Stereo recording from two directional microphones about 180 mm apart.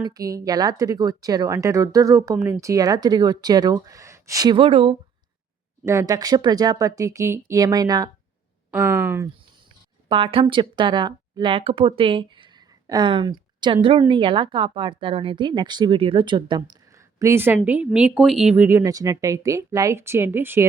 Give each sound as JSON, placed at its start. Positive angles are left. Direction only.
{"t": 0.0, "sound": "speech", "side_deg": -20}
{"t": 5.8, "sound": "speech", "side_deg": -15}
{"t": 10.1, "sound": "speech", "side_deg": -30}